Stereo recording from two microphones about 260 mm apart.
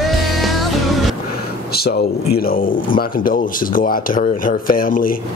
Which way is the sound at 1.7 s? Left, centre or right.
Left.